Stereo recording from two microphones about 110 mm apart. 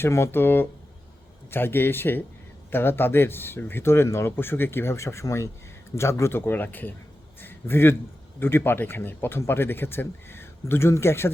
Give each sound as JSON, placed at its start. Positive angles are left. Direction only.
{"t": 0.0, "sound": "a man's voice", "side_deg": 25}